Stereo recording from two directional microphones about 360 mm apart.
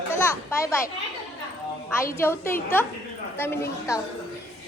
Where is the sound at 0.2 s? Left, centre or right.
Centre.